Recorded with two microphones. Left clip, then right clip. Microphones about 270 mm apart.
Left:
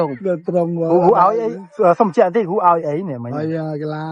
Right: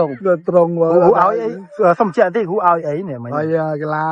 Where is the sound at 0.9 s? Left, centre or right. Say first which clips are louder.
Right 1 dB; left.